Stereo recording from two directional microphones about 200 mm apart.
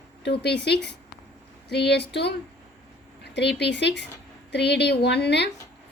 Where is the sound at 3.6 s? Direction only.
60° left (ahead or behind).